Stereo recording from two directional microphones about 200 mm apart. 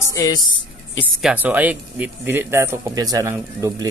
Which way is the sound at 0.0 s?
20° left (ahead or behind).